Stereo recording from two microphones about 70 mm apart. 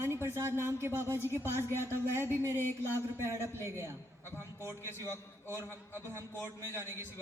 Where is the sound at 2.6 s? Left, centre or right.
Left.